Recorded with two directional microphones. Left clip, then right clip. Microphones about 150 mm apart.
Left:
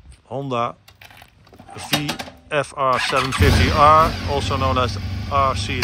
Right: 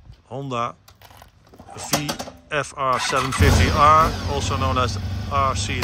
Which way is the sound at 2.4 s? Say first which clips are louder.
Left 3 dB; 5° right (ahead or behind).